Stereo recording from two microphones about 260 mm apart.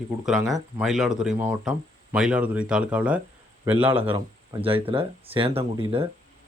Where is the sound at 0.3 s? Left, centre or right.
Centre.